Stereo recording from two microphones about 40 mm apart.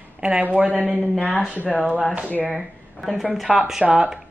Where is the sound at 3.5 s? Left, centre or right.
Centre.